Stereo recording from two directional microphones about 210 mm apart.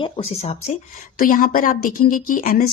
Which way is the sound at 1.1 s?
40° left (ahead or behind).